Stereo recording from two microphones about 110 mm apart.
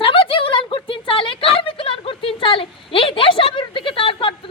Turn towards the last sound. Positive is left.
turn(degrees=50)  # may be behind; listen again after turning